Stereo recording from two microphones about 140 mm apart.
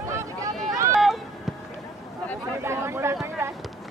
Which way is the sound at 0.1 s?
20° right (ahead or behind).